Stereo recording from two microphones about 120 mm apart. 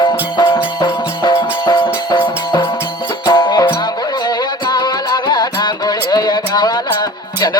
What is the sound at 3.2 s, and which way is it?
Music, 35° left (ahead or behind).